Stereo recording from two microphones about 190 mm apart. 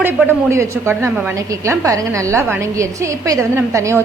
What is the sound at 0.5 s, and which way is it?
A woman's voice, 15° right (ahead or behind).